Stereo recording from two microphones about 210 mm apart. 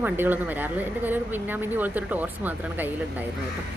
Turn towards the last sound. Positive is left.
turn(degrees=-10)  # may be behind; listen again after turning